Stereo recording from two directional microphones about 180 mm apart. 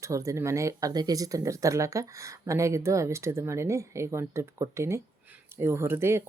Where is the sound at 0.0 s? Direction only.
15° right (ahead or behind).